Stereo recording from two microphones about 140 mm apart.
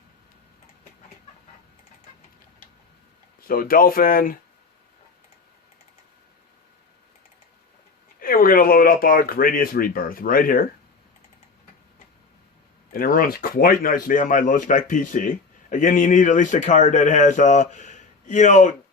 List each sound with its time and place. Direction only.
3.4 s speech: 90° left
8.2 s speech: 90° left
12.9 s speech: 90° left; by 18.8 s 60° left (ahead or behind)